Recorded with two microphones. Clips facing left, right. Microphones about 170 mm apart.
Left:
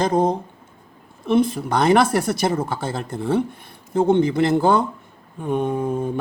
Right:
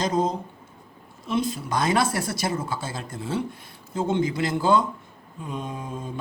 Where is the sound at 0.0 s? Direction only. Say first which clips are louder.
Left 5 dB; 60° left (ahead or behind).